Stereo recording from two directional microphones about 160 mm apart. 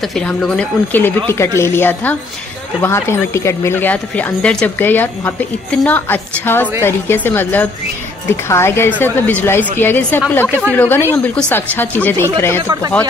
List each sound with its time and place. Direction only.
0.0 s speech: 5° left (ahead or behind)